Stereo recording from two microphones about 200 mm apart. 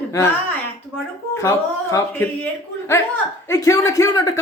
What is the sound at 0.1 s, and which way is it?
Speech, 15° left (ahead or behind).